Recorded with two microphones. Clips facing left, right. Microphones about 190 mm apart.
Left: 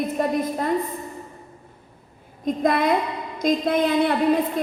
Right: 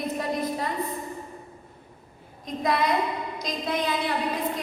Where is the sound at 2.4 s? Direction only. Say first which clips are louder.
Left 5 dB; 50° left (ahead or behind).